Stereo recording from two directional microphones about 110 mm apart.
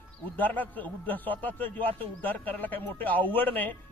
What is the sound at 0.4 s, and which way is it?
Speech, 15° left (ahead or behind).